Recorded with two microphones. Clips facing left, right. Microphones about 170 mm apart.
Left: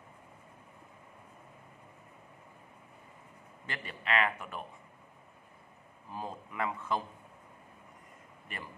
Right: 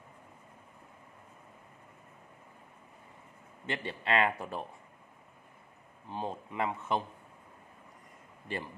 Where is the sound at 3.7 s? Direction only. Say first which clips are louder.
Right 3 dB; 25° right (ahead or behind).